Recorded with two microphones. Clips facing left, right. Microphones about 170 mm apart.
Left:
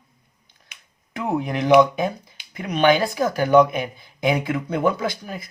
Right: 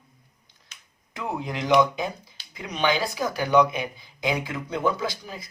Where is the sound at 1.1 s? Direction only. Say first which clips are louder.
Left 6 dB; 60° left (ahead or behind).